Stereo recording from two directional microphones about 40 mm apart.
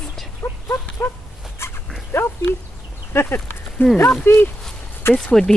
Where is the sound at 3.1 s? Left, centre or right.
Left.